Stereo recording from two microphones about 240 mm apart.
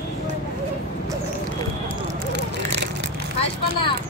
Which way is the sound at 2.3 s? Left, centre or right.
Right.